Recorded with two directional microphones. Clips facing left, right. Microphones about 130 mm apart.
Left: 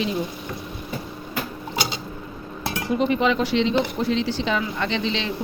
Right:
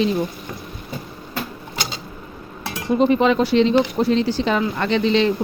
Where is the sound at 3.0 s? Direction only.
40° right (ahead or behind).